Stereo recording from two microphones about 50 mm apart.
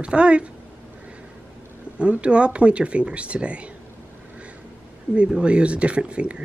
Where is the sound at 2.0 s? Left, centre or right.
Right.